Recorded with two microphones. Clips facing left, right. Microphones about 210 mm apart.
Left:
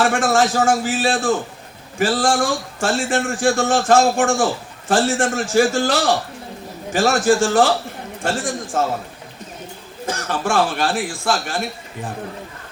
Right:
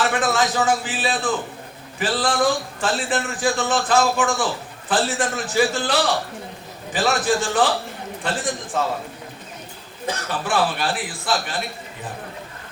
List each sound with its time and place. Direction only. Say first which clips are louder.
0.0 s speech: left 4 dB; 45° left (ahead or behind)
10.1 s speech: left 3 dB; 45° left (ahead or behind)